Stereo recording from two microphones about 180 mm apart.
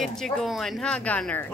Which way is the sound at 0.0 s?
5° left (ahead or behind).